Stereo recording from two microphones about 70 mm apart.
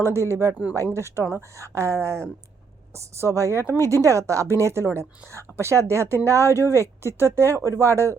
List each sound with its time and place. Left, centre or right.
0.0 s speech: right
3.8 s speech: right